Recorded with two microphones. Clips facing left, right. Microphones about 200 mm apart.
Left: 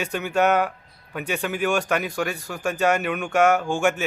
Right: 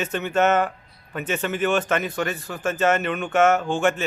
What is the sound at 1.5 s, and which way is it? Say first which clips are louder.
Speech: right 1 dB; 10° left (ahead or behind).